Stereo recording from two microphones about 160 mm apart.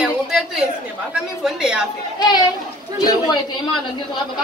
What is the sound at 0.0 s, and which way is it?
Chatter, 5° right (ahead or behind).